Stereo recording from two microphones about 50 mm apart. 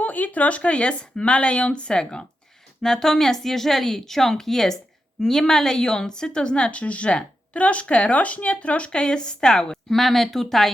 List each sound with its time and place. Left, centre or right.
0.0 s a woman's voice: left; by 9.7 s centre
9.9 s speech: centre